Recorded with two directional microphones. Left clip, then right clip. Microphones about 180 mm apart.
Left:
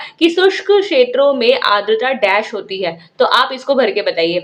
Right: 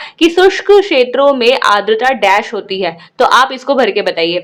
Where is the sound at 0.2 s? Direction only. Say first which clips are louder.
Right 3 dB; 30° right (ahead or behind).